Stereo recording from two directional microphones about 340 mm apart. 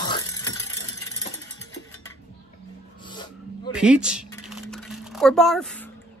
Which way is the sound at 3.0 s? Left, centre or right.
Centre.